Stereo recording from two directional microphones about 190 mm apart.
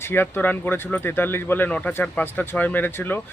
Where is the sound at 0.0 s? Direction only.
10° left (ahead or behind).